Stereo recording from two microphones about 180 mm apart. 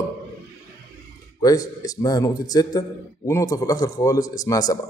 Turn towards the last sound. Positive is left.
turn(degrees=20)  # may be behind; listen again after turning